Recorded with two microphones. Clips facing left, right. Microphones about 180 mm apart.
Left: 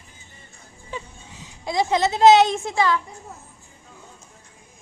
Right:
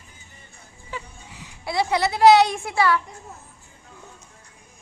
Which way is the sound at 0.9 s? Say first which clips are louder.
Left 1 dB; 20° left (ahead or behind).